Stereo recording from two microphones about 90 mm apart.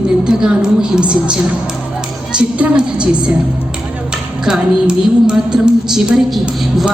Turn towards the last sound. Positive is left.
turn(degrees=-5)  # may be behind; listen again after turning